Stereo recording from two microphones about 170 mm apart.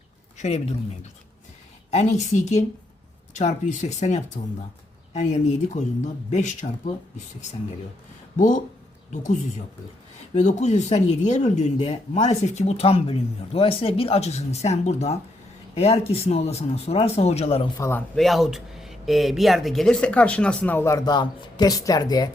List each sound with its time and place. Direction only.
0.3 s speech: 40° left (ahead or behind)
1.9 s speech: 40° left (ahead or behind)
8.4 s speech: 45° left (ahead or behind)
17.7 s speech: 15° left (ahead or behind)
18.2 s speech: centre (ahead or behind); by 22.3 s 25° left (ahead or behind)